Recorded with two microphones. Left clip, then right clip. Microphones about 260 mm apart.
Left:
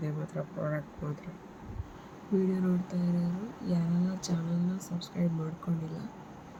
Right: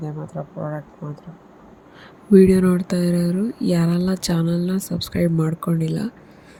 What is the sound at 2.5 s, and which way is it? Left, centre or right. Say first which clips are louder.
Speech: right 15 dB; right.